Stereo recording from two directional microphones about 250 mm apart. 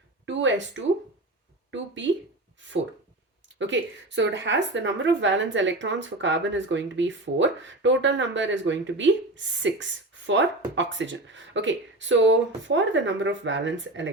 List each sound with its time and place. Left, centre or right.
0.3 s speech: right
3.6 s a woman's voice: right